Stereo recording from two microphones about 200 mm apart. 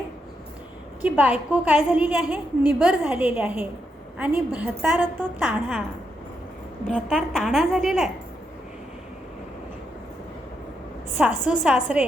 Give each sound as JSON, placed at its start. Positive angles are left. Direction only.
{"t": 1.0, "sound": "a woman's voice", "side_deg": -5}
{"t": 6.8, "sound": "a woman's voice", "side_deg": 0}
{"t": 11.2, "sound": "a woman's voice", "side_deg": -5}